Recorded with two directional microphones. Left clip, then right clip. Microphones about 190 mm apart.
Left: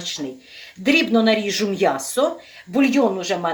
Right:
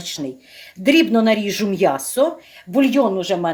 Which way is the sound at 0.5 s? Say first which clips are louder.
Right 3 dB; 50° right (ahead or behind).